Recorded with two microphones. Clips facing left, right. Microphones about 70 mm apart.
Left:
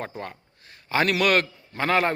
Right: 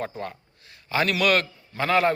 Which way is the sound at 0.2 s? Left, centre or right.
Left.